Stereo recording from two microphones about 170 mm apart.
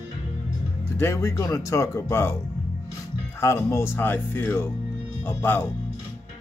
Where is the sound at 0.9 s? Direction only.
15° left (ahead or behind).